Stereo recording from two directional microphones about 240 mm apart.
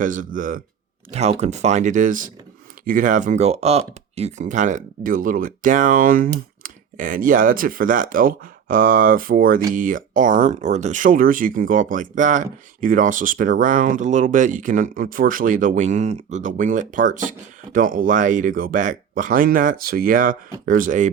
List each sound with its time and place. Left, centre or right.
0.0 s speech: right